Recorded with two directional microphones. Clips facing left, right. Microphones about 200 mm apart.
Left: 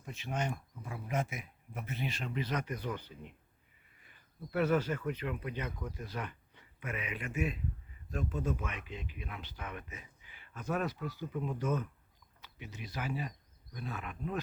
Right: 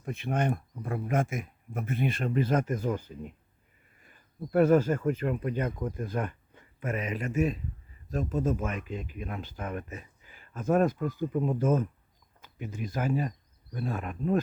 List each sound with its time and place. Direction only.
0.0 s speech: 55° right (ahead or behind)